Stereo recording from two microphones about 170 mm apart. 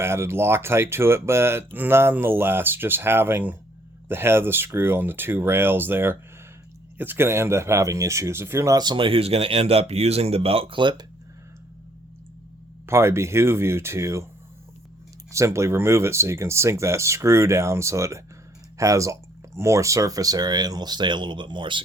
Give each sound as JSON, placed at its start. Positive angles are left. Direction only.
{"t": 0.0, "sound": "speech", "side_deg": -15}
{"t": 12.8, "sound": "speech", "side_deg": -15}
{"t": 15.3, "sound": "speech", "side_deg": -15}